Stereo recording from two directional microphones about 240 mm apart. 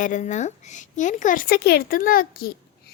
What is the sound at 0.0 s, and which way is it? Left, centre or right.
A child's voice, left.